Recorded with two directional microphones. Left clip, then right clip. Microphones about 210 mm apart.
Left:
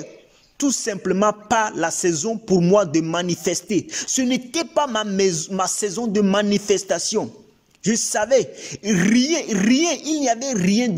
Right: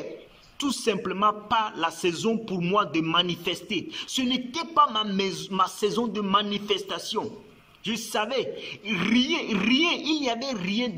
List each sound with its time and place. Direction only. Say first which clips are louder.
0.6 s a man's voice: left 3 dB; 35° left (ahead or behind)